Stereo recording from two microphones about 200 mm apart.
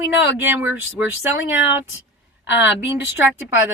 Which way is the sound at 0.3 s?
10° right (ahead or behind).